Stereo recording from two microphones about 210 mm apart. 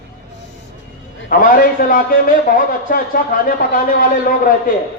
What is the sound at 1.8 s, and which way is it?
Speech, 45° left (ahead or behind).